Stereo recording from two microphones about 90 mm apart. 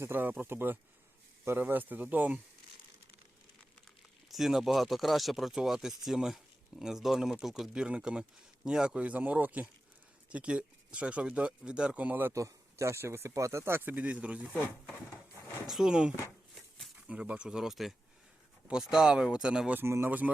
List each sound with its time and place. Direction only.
0.0 s speech: 25° right (ahead or behind)
4.3 s speech: centre (ahead or behind); by 12.3 s 20° right (ahead or behind)
12.3 s speech: 35° right (ahead or behind); by 14.5 s 15° right (ahead or behind)
15.6 s speech: 5° right (ahead or behind)
19.8 s speech: 25° right (ahead or behind)